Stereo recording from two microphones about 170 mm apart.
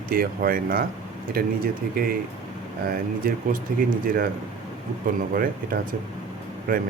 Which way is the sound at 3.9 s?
55° right (ahead or behind).